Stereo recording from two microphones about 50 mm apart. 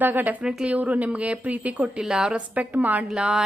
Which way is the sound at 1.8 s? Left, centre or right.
Centre.